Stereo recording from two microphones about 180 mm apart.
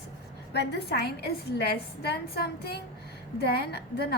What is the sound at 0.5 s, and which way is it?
A woman's voice, 70° left (ahead or behind).